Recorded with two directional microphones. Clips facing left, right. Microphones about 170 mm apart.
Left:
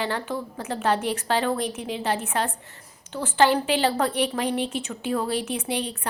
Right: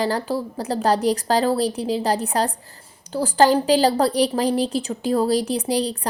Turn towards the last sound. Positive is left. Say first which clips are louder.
# right 6 dB
turn(degrees=-35)  # may be behind; listen again after turning